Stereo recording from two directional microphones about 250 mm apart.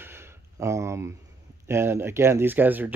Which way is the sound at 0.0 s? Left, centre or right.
Centre.